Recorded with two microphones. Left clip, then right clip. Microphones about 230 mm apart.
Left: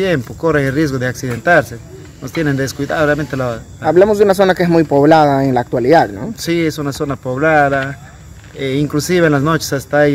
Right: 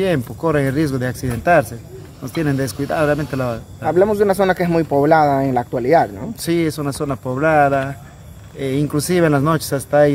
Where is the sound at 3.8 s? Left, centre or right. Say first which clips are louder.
Left 5 dB; left.